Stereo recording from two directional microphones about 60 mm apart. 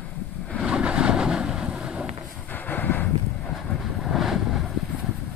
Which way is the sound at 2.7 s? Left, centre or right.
Left.